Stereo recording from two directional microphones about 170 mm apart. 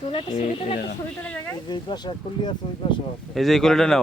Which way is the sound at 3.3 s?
Centre (ahead or behind).